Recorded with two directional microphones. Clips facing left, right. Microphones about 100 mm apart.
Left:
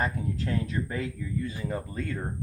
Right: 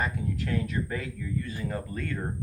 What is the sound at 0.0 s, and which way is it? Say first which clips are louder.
Speech: left 1 dB; 30° left (ahead or behind).